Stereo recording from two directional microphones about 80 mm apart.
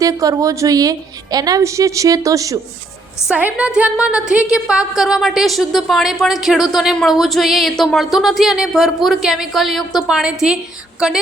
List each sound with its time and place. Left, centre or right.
0.0 s a woman's voice: right
3.3 s a woman's voice: centre